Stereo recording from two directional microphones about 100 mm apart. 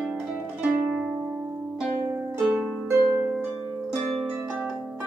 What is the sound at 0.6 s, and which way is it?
Harp, 10° right (ahead or behind).